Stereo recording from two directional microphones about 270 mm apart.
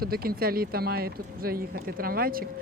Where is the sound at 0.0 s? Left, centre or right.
Right.